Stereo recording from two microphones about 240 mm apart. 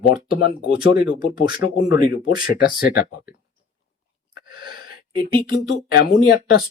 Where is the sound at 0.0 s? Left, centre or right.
Left.